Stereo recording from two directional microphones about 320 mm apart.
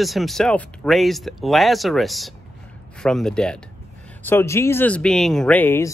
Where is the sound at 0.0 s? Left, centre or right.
Centre.